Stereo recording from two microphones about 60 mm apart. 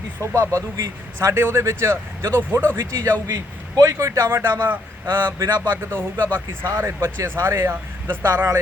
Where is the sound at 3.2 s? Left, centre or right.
Right.